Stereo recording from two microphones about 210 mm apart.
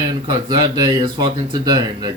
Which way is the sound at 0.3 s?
20° right (ahead or behind).